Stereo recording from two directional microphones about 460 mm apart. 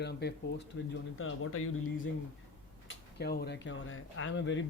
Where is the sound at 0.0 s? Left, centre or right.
Left.